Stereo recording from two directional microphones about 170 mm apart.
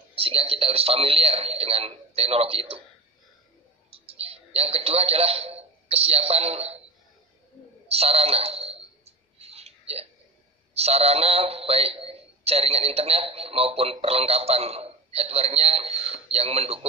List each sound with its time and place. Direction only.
0.1 s a man's voice: 35° right (ahead or behind)
3.9 s a man's voice: 35° right (ahead or behind)
7.9 s clicking: 35° right (ahead or behind)
10.7 s a man's voice: 35° right (ahead or behind)